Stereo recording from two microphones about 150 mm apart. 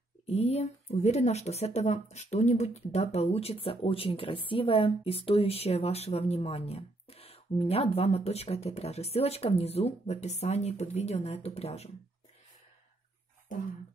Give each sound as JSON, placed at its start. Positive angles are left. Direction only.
{"t": 0.3, "sound": "speech", "side_deg": 45}